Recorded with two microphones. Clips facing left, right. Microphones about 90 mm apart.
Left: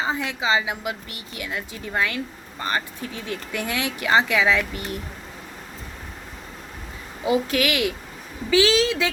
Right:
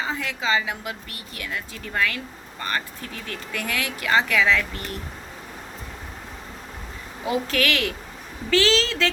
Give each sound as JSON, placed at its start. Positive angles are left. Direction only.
{"t": 0.0, "sound": "a woman's voice", "side_deg": 20}
{"t": 7.3, "sound": "a woman's voice", "side_deg": 15}